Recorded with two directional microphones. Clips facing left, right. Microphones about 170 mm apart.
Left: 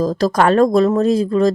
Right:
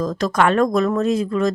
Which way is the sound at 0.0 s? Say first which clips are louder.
Left 3 dB; 35° left (ahead or behind).